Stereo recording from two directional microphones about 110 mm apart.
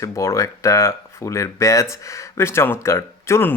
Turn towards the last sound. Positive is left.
turn(degrees=25)  # may be behind; listen again after turning